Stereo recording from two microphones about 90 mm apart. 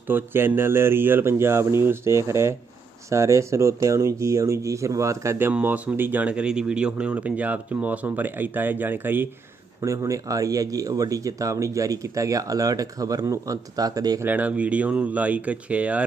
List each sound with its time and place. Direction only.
0.1 s speech: 25° right (ahead or behind)
5.5 s speech: 15° right (ahead or behind)
9.8 s speech: 35° right (ahead or behind)
14.3 s speech: 15° right (ahead or behind)